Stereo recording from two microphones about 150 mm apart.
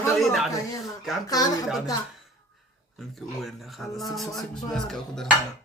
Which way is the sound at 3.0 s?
Centre (ahead or behind).